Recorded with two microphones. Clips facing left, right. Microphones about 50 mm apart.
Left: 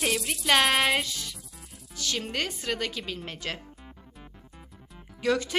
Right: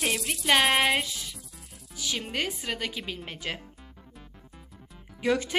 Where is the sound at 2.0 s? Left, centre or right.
Centre.